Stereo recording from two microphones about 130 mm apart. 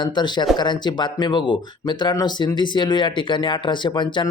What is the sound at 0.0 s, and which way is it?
Speech, 35° left (ahead or behind).